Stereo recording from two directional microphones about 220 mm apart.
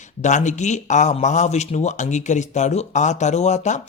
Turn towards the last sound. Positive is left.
turn(degrees=30)  # may be behind; listen again after turning